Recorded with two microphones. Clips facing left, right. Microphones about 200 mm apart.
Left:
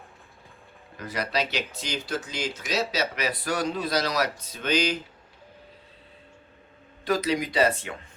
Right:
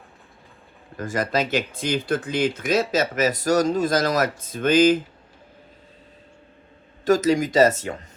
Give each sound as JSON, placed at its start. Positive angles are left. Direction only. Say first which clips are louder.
{"t": 0.9, "sound": "speech", "louder": "right 5 dB", "side_deg": -45}
{"t": 7.0, "sound": "speech", "louder": "right 7 dB", "side_deg": -45}